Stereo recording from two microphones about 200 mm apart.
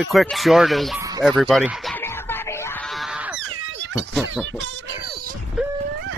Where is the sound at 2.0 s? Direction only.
10° left (ahead or behind).